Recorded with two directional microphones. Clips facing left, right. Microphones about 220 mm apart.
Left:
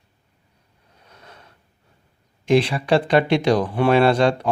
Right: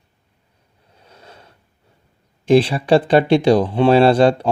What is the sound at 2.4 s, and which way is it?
Speech, 30° right (ahead or behind).